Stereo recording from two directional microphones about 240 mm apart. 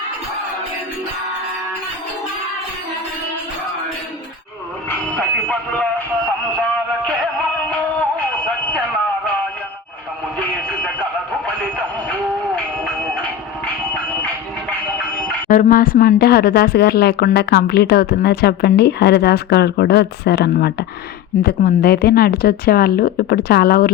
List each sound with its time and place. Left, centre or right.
5.5 s speech: centre
6.6 s a sound: centre
7.7 s music: centre
10.3 s a sound: centre
12.5 s music: centre
15.4 s speech: left